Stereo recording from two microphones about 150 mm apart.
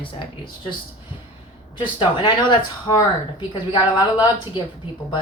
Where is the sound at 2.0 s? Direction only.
30° left (ahead or behind).